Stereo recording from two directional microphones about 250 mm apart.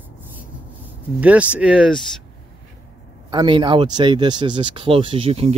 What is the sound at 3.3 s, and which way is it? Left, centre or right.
Speech, centre.